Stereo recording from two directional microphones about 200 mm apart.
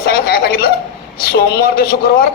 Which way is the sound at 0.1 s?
50° left (ahead or behind).